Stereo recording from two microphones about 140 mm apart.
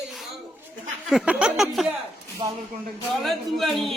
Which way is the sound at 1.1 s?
5° right (ahead or behind).